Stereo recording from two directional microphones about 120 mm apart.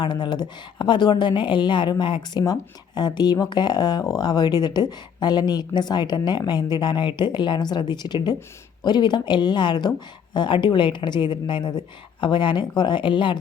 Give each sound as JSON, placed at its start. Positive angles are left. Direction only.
{"t": 0.0, "sound": "speech", "side_deg": 40}